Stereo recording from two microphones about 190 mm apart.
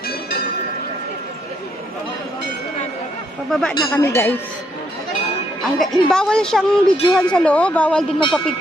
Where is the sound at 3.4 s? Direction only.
5° left (ahead or behind).